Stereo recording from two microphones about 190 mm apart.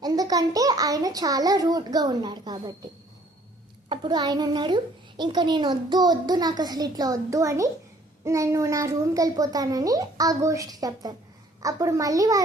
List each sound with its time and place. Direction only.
0.0 s a child's voice: 20° right (ahead or behind)
3.8 s a child's voice: 25° right (ahead or behind)